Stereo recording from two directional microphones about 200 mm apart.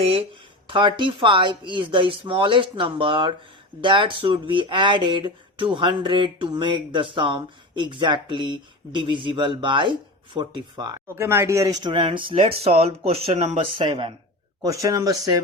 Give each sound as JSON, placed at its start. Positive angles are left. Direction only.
{"t": 0.0, "sound": "speech", "side_deg": -30}